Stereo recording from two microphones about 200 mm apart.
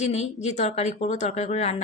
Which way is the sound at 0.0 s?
35° left (ahead or behind).